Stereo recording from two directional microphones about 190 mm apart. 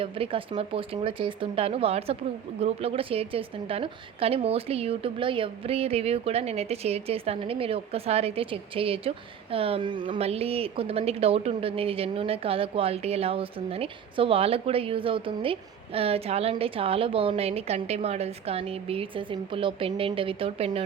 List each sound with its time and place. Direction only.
0.0 s a woman's voice: 30° right (ahead or behind)